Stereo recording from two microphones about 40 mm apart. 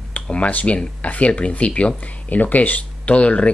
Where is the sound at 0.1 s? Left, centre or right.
Left.